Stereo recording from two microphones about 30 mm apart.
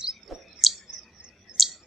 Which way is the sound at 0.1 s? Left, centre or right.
Centre.